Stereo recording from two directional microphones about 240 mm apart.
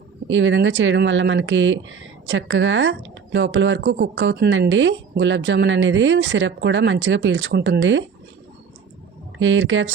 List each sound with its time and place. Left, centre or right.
0.3 s speech: right
9.4 s speech: right